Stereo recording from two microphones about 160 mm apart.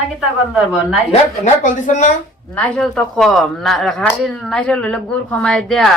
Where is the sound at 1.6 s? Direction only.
50° left (ahead or behind).